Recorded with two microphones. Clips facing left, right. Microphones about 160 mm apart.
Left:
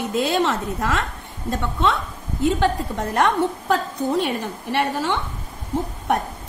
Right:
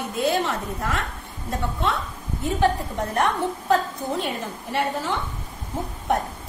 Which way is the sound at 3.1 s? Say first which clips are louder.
Left 4 dB; 85° left.